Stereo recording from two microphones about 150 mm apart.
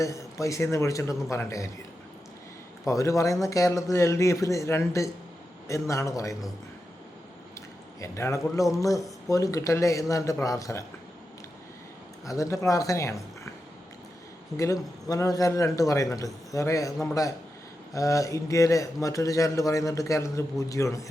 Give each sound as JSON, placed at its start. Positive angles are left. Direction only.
{"t": 0.0, "sound": "a man's voice", "side_deg": 20}
{"t": 2.8, "sound": "a man's voice", "side_deg": 20}
{"t": 8.0, "sound": "a man's voice", "side_deg": 20}
{"t": 12.2, "sound": "a man's voice", "side_deg": 20}
{"t": 14.5, "sound": "a man's voice", "side_deg": 20}